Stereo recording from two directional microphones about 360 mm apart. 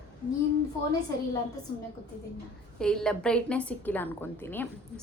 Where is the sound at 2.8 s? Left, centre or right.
Centre.